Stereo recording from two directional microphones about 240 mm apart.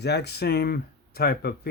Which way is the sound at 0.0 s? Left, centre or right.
Left.